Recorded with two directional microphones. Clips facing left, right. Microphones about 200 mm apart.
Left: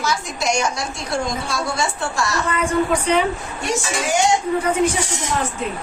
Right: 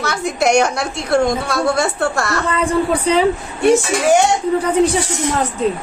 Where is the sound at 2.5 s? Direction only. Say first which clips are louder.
Right 3 dB; 35° right (ahead or behind).